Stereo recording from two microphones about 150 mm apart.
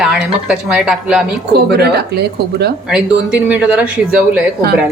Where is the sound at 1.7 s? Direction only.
90° right.